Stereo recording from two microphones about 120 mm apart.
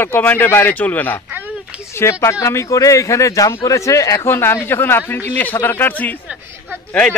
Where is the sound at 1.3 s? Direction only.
15° right (ahead or behind).